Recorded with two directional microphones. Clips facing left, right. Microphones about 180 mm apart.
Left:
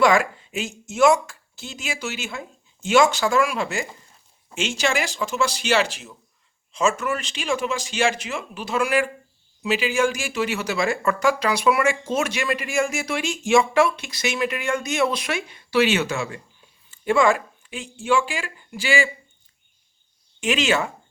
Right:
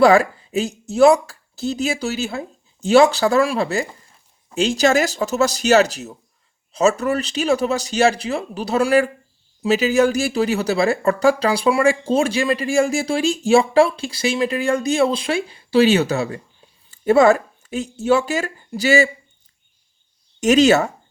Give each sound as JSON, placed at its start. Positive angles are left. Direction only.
{"t": 0.0, "sound": "speech", "side_deg": -35}
{"t": 20.4, "sound": "speech", "side_deg": -40}